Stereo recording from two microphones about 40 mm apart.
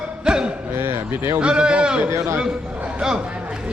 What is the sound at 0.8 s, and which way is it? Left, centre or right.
Speech, right.